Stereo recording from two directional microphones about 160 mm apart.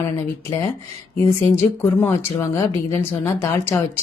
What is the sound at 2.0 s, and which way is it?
A woman's voice, 15° left (ahead or behind).